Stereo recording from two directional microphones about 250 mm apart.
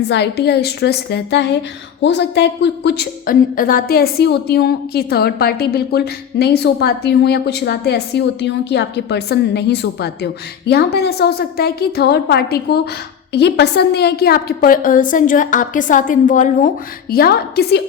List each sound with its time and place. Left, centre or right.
0.1 s a woman's voice: left